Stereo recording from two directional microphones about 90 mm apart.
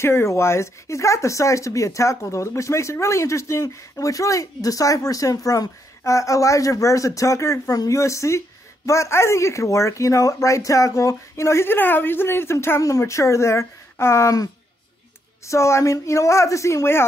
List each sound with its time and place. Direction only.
0.0 s speech: 30° left (ahead or behind)
15.4 s speech: 35° left (ahead or behind)